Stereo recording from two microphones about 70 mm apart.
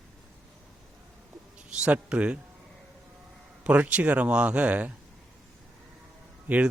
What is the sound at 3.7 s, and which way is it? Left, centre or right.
Speech, centre.